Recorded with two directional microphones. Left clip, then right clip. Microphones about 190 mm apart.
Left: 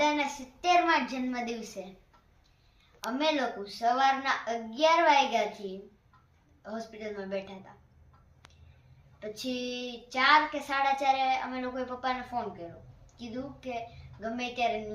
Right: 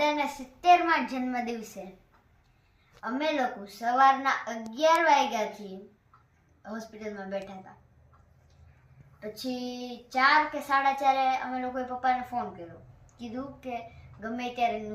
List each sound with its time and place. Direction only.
0.0 s a child's voice: 5° right (ahead or behind)
3.1 s a child's voice: 5° right (ahead or behind)
6.6 s a child's voice: 5° right (ahead or behind)
9.3 s a child's voice: 5° right (ahead or behind)